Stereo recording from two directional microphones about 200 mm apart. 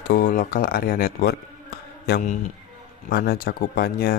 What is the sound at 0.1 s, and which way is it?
A man's voice, 45° left (ahead or behind).